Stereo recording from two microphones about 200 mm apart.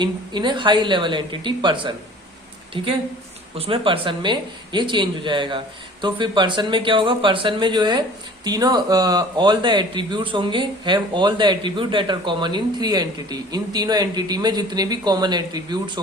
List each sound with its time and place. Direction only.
0.0 s speech: 20° right (ahead or behind)